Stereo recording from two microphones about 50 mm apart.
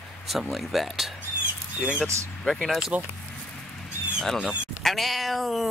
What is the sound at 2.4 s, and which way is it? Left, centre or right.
Speech, centre.